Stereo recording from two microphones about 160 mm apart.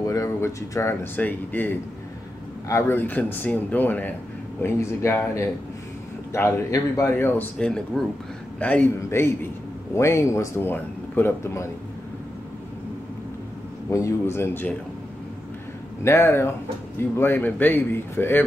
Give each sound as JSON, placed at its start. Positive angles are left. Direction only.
{"t": 0.0, "sound": "speech", "side_deg": 20}
{"t": 2.7, "sound": "a man's voice", "side_deg": 15}
{"t": 13.8, "sound": "a man's voice", "side_deg": 20}
{"t": 16.0, "sound": "a man's voice", "side_deg": 15}